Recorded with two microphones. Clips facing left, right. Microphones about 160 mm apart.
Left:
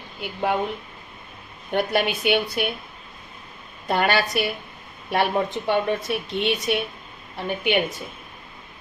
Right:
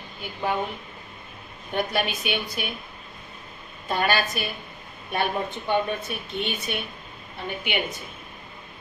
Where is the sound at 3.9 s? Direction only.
70° left (ahead or behind).